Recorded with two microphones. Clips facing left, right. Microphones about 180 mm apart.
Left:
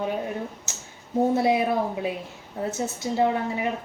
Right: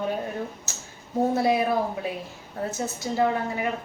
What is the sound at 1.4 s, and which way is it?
Speech, 20° left (ahead or behind).